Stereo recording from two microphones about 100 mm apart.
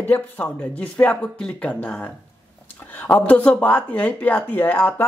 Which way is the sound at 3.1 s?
10° left (ahead or behind).